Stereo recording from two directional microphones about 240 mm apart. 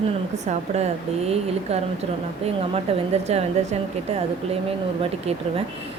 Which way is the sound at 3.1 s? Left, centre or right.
Right.